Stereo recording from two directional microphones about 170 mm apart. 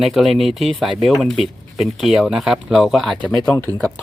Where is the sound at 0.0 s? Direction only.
Centre (ahead or behind).